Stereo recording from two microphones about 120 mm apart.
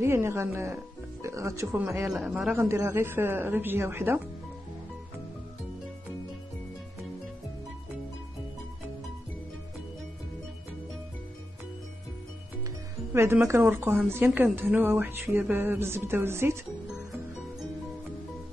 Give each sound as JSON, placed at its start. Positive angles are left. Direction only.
{"t": 0.0, "sound": "speech", "side_deg": -20}
{"t": 2.1, "sound": "speech", "side_deg": 0}
{"t": 2.5, "sound": "speech", "side_deg": -20}
{"t": 13.1, "sound": "speech", "side_deg": -20}